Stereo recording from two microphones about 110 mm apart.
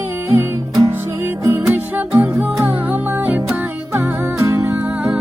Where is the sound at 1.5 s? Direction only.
15° right (ahead or behind).